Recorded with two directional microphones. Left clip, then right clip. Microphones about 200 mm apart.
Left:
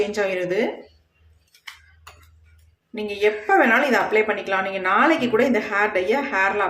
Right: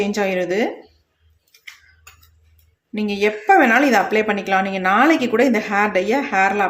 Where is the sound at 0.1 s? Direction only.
35° right (ahead or behind).